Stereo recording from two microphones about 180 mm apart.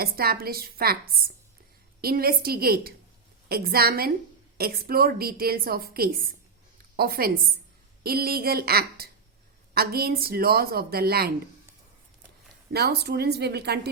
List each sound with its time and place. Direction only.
0.0 s a woman's voice: 55° right (ahead or behind)
12.7 s a woman's voice: 65° right (ahead or behind)